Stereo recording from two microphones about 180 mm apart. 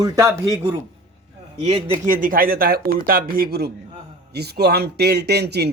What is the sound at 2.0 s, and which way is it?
Speech, 50° right (ahead or behind).